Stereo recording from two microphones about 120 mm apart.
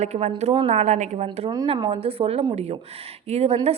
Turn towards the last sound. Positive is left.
turn(degrees=-60)  # may be behind; listen again after turning